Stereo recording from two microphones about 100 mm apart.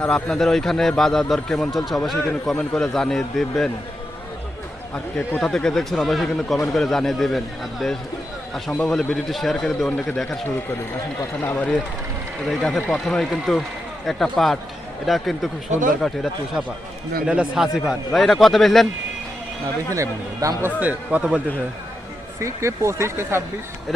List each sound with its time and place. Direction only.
0.0 s speech: 10° left (ahead or behind)
5.1 s speech: 10° left (ahead or behind)
11.4 s speech: 15° left (ahead or behind)
12.5 s speech: 5° left (ahead or behind)
17.2 s speech: 10° right (ahead or behind)
19.9 s speech: 35° right (ahead or behind)
20.7 s a man's voice: 15° right (ahead or behind)
22.4 s speech: 30° right (ahead or behind)